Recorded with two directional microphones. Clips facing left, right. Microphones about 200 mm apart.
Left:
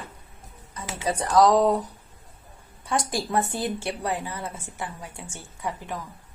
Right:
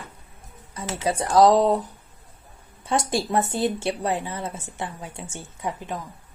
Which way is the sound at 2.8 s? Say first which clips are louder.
Right 3 dB; 25° right (ahead or behind).